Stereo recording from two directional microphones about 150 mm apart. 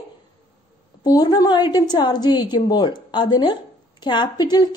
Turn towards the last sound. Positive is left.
turn(degrees=30)  # may be behind; listen again after turning